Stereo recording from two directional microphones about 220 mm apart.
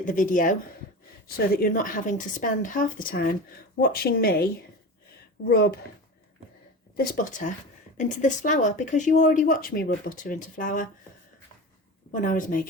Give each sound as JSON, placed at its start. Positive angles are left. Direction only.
{"t": 0.0, "sound": "speech", "side_deg": 35}
{"t": 1.5, "sound": "speech", "side_deg": 40}
{"t": 5.5, "sound": "speech", "side_deg": 45}
{"t": 6.9, "sound": "speech", "side_deg": 40}
{"t": 12.1, "sound": "speech", "side_deg": 35}